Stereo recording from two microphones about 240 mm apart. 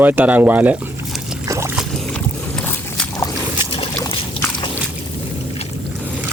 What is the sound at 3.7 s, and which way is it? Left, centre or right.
Trickle, left.